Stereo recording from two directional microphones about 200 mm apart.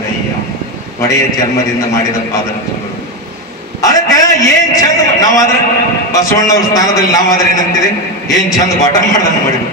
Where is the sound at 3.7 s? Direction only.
15° left (ahead or behind).